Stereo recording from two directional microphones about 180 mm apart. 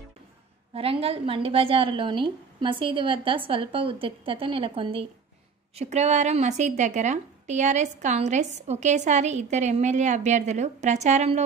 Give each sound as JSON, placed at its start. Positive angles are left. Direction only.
{"t": 0.7, "sound": "a woman's voice", "side_deg": -30}